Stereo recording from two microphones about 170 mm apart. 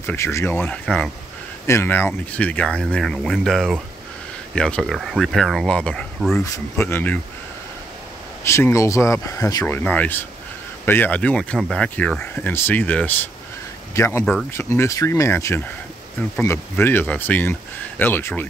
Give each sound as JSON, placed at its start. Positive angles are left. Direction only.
{"t": 0.0, "sound": "speech", "side_deg": 15}
{"t": 6.4, "sound": "speech", "side_deg": 15}
{"t": 8.5, "sound": "speech", "side_deg": 15}
{"t": 9.7, "sound": "speech", "side_deg": 10}